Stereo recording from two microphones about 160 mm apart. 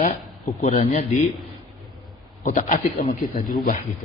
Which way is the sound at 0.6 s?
35° left (ahead or behind).